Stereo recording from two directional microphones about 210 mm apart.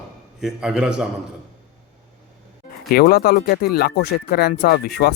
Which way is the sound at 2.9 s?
45° left (ahead or behind).